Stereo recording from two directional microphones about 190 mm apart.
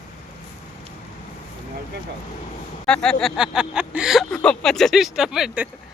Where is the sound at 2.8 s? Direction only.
5° left (ahead or behind).